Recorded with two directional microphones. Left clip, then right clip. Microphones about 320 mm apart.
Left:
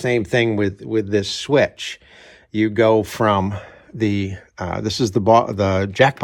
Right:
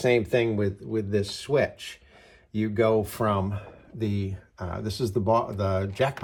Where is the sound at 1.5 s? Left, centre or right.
Left.